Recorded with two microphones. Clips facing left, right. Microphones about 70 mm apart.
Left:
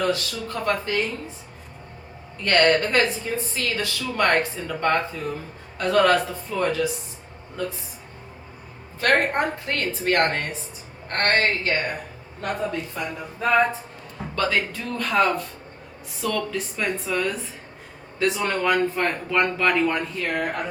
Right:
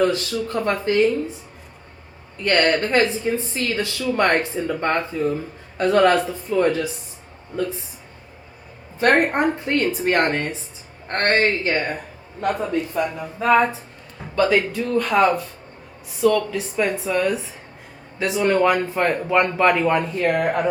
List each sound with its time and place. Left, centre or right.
0.0 s a woman's voice: right
2.4 s speech: centre
2.8 s a woman's voice: right
9.0 s a woman's voice: right
13.1 s a woman's voice: centre; by 20.7 s right